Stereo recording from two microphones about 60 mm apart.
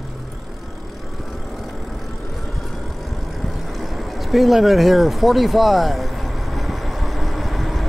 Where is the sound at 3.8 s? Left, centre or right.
Centre.